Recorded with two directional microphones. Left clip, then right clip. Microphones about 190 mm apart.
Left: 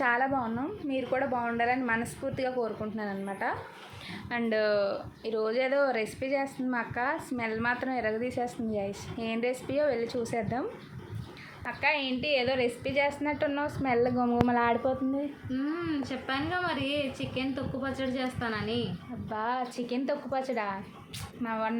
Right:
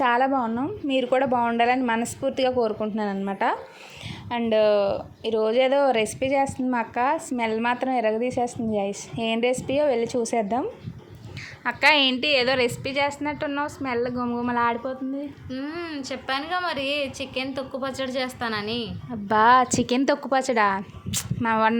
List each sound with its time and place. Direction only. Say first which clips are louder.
0.0 s a woman's voice: right 6 dB; 45° right (ahead or behind)
4.3 s speech: right 8 dB; 25° right (ahead or behind)
11.6 s a woman's voice: right 10 dB; 60° right (ahead or behind); by 12.7 s 45° right (ahead or behind)
12.8 s a woman's voice: right 4 dB; 25° right (ahead or behind); by 14.9 s 10° right (ahead or behind)
15.4 s a woman's voice: right 2 dB; 60° right (ahead or behind)